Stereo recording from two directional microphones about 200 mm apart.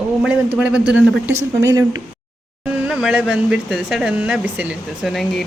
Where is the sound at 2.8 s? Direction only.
5° right (ahead or behind).